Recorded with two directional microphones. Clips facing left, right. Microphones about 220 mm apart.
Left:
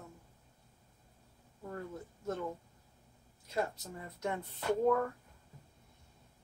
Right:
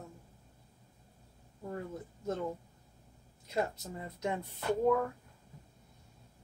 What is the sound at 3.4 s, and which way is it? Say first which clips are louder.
Speech: right 2 dB; 15° right (ahead or behind).